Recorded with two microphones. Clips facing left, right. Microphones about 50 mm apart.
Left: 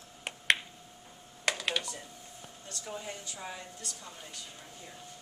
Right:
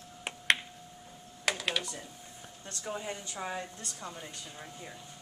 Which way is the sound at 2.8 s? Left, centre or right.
Centre.